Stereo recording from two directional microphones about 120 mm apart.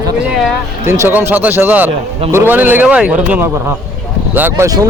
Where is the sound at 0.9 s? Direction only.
20° right (ahead or behind).